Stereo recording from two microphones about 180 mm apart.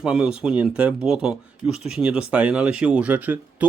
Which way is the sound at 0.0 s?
5° right (ahead or behind).